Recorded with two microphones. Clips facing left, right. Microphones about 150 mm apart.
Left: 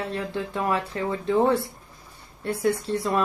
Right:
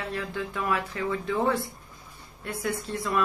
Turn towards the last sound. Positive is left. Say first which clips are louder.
# left 4 dB
turn(degrees=30)  # may be behind; listen again after turning